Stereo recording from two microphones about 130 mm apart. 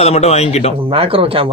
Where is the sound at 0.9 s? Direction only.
45° right (ahead or behind).